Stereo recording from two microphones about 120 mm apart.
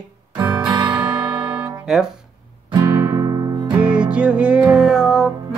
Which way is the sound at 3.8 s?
10° right (ahead or behind).